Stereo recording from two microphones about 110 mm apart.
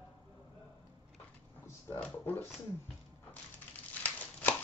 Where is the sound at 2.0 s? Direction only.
15° left (ahead or behind).